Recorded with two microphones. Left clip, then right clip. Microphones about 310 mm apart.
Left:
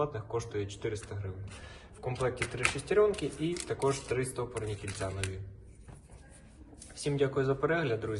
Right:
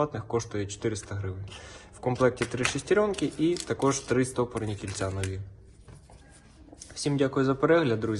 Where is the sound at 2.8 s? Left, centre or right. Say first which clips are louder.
Right 2 dB; right.